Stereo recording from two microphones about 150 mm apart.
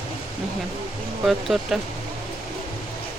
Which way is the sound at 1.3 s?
Centre (ahead or behind).